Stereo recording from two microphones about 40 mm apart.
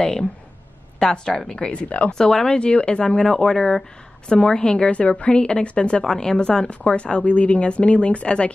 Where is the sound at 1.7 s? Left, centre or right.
Left.